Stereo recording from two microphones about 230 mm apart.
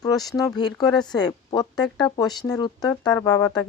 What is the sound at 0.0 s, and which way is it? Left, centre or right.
Speech, centre.